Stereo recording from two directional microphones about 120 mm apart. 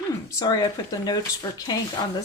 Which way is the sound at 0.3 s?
30° left (ahead or behind).